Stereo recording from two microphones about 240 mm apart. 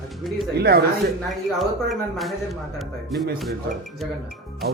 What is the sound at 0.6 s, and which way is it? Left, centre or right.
Speech, right.